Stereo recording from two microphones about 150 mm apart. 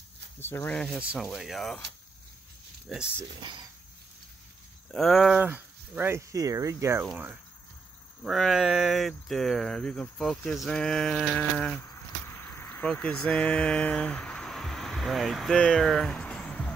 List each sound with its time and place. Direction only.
0.4 s speech: 15° left (ahead or behind)
0.9 s speech: 5° right (ahead or behind)
2.9 s speech: centre (ahead or behind)
4.9 s speech: centre (ahead or behind)
5.5 s speech: 15° right (ahead or behind)
8.2 s speech: centre (ahead or behind)
11.8 s vehicle: 15° left (ahead or behind)